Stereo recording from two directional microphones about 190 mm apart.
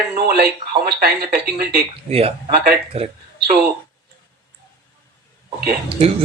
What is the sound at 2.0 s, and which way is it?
A man's voice, 35° right (ahead or behind).